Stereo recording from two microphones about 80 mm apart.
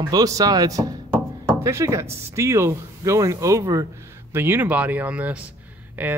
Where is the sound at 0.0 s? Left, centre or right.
Right.